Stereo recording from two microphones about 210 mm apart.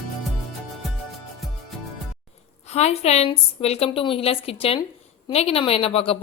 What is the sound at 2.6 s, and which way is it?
A woman's voice, 30° left (ahead or behind).